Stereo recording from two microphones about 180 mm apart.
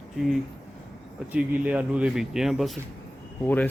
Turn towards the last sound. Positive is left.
turn(degrees=10)  # may be behind; listen again after turning